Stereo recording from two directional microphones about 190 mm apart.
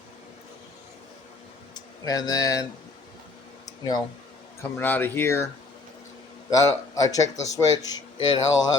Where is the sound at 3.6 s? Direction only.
20° left (ahead or behind).